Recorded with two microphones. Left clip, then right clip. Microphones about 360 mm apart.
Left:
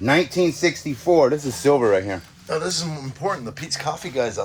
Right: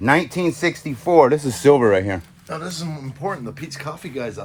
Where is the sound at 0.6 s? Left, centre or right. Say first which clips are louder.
Left 1 dB; centre.